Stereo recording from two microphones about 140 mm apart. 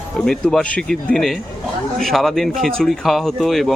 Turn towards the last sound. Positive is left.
turn(degrees=0)  # may be behind; listen again after turning